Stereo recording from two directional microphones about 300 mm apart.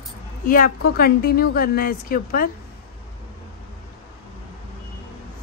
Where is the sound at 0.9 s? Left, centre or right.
Left.